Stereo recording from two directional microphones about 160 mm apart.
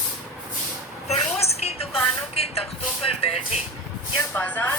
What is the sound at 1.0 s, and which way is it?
Music, 40° left (ahead or behind).